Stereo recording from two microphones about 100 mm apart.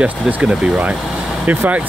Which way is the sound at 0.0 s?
10° right (ahead or behind).